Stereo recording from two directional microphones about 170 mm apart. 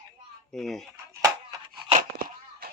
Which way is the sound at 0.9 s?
20° right (ahead or behind).